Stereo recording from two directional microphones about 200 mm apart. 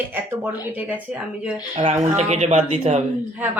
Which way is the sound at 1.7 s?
35° right (ahead or behind).